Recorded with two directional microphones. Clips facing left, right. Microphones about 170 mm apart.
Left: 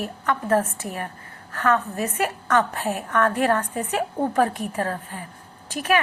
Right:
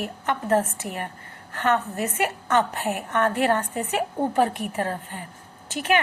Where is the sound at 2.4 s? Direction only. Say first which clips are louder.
Left 1 dB; 20° right (ahead or behind).